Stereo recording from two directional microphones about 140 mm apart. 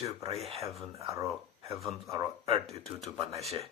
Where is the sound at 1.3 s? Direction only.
Centre (ahead or behind).